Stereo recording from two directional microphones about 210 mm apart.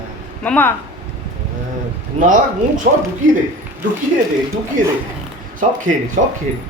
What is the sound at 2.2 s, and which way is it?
Speech, 40° right (ahead or behind).